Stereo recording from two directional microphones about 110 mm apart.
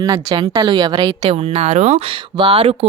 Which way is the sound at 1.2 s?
60° right (ahead or behind).